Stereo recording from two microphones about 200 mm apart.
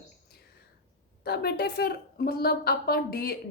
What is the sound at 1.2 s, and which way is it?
Speech, 50° left (ahead or behind).